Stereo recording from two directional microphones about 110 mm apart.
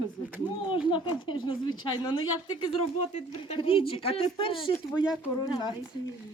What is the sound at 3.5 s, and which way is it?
Speech, 55° left (ahead or behind).